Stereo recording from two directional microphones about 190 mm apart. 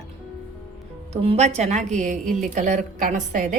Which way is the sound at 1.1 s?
30° right (ahead or behind).